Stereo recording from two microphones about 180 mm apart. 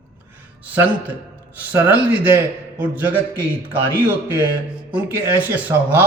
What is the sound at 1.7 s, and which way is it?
A man's voice, 10° right (ahead or behind).